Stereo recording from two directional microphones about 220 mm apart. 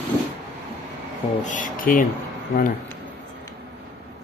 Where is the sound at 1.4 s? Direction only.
35° left (ahead or behind).